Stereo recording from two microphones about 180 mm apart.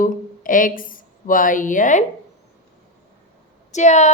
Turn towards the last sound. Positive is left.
turn(degrees=40)  # may be behind; listen again after turning